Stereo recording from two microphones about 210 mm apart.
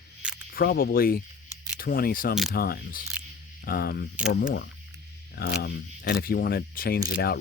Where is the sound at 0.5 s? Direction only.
45° left (ahead or behind).